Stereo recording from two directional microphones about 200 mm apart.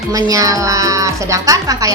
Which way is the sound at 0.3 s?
15° right (ahead or behind).